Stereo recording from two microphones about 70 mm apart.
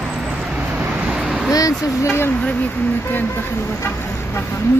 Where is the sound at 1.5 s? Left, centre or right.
Left.